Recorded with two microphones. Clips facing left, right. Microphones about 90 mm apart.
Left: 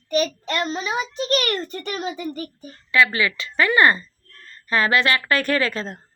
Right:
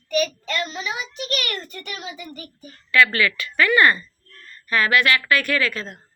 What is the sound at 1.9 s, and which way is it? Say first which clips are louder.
Speech: left 9 dB; 45° left (ahead or behind).